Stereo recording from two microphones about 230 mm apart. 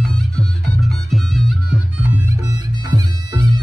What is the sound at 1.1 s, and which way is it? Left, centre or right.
Music, centre.